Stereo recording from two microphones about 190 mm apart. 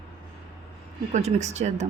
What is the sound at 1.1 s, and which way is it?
Speech, 35° right (ahead or behind).